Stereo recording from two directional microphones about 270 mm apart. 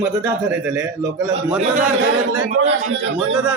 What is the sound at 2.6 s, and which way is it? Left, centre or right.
Speech, right.